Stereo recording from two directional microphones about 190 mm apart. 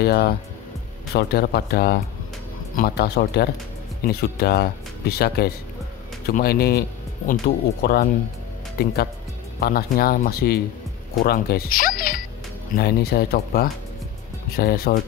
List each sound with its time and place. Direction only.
0.0 s speech: 55° left (ahead or behind)